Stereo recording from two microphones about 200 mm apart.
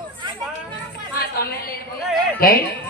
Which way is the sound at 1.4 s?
50° left (ahead or behind).